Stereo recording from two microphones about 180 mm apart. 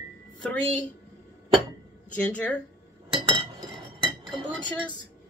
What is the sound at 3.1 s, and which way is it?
Chink, 25° right (ahead or behind).